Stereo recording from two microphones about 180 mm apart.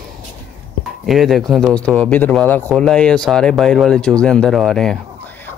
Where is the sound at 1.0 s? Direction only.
Centre (ahead or behind).